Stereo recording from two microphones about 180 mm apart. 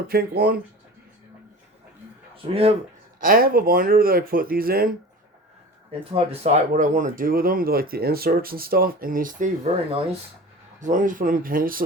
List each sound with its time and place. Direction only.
0.1 s speech: 55° right (ahead or behind)
2.3 s speech: 35° right (ahead or behind)
3.2 s speech: 50° right (ahead or behind)
6.1 s speech: 35° right (ahead or behind)
10.8 s speech: 45° right (ahead or behind)